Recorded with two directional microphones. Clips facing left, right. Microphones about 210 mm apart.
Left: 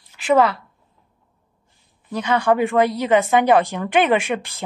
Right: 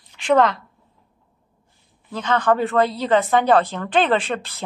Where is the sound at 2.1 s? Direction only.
10° left (ahead or behind).